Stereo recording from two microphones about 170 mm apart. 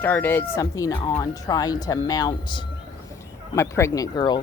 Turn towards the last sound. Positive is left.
turn(degrees=25)  # may be behind; listen again after turning